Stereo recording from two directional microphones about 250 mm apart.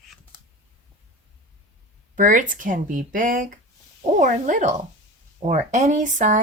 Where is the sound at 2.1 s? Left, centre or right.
Right.